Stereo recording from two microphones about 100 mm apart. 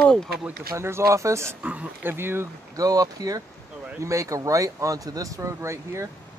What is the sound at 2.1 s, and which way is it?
Speech, 25° right (ahead or behind).